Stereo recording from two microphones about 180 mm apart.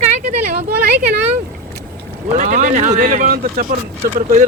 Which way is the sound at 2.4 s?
45° right (ahead or behind).